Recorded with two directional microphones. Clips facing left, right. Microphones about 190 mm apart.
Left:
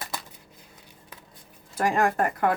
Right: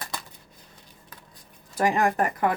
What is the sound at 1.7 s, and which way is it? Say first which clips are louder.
Speech: right 1 dB; 20° right (ahead or behind).